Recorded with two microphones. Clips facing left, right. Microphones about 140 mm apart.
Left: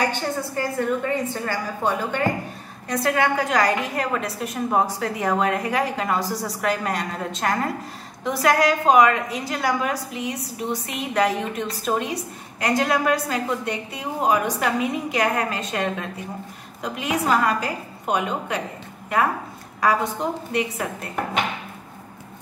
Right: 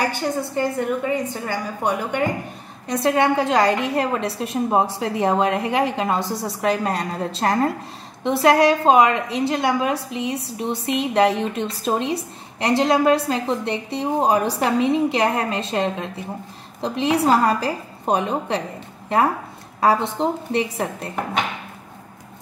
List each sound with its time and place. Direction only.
0.6 s a woman's voice: 15° right (ahead or behind); by 18.6 s 30° right (ahead or behind)
19.8 s a woman's voice: 25° right (ahead or behind)